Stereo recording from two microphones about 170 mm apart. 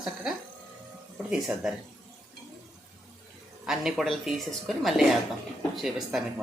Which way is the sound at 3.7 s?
Centre (ahead or behind).